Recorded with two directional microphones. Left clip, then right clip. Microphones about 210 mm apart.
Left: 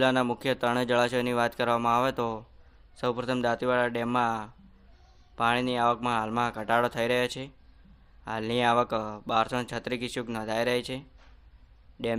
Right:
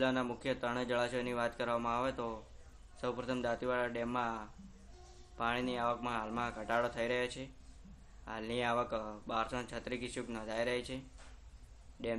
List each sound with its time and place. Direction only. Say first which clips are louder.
0.0 s speech: left 10 dB; 50° left (ahead or behind)